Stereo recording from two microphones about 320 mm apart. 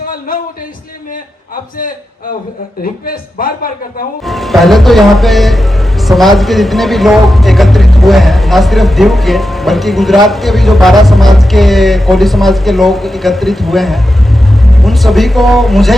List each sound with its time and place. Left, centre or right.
2.8 s speech: left
4.3 s speech: centre